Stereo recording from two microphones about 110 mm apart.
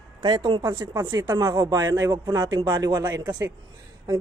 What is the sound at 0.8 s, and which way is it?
Speech, 25° right (ahead or behind).